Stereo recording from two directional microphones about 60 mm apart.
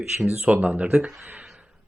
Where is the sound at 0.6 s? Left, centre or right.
Right.